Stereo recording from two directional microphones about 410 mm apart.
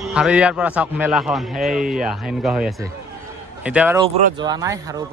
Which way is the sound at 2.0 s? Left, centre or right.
Centre.